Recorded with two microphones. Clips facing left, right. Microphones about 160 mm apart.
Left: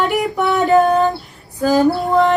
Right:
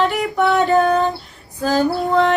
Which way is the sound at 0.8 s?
20° left (ahead or behind).